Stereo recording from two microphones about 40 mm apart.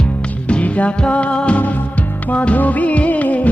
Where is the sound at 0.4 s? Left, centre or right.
Left.